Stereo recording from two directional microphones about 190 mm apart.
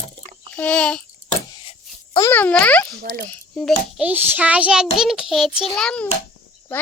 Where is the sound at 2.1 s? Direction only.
15° left (ahead or behind).